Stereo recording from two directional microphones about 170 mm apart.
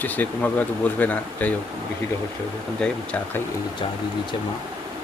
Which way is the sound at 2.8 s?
5° left (ahead or behind).